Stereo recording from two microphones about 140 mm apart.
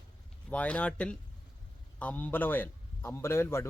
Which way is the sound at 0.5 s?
10° left (ahead or behind).